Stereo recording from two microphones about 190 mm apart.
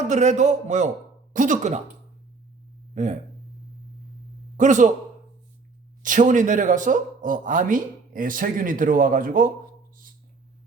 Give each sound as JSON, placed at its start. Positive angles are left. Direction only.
{"t": 0.1, "sound": "a man's voice", "side_deg": -40}
{"t": 2.9, "sound": "speech", "side_deg": -40}
{"t": 4.5, "sound": "a man's voice", "side_deg": -40}
{"t": 6.0, "sound": "a man's voice", "side_deg": -45}